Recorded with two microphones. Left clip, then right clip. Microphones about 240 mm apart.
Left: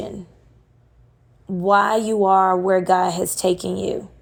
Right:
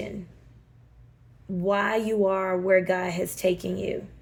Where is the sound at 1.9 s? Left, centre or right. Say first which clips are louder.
Left 6 dB; left.